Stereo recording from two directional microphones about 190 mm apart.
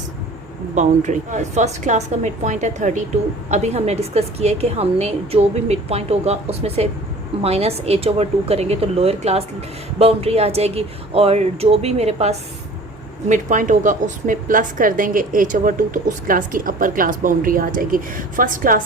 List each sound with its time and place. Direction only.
0.8 s a woman's voice: 40° right (ahead or behind)